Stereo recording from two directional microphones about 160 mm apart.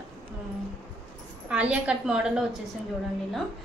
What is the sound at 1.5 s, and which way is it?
Speech, 5° right (ahead or behind).